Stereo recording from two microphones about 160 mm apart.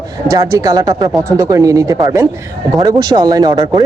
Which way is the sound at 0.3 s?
20° right (ahead or behind).